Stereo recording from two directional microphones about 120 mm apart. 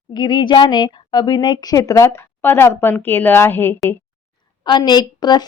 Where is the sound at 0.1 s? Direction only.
40° left (ahead or behind); by 3.8 s 20° left (ahead or behind).